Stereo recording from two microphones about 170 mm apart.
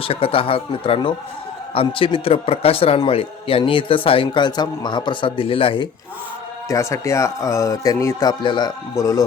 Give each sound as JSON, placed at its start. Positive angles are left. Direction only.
{"t": 0.0, "sound": "a man's voice", "side_deg": 35}
{"t": 6.7, "sound": "speech", "side_deg": 20}